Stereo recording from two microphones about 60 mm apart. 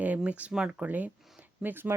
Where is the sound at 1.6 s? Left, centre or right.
Right.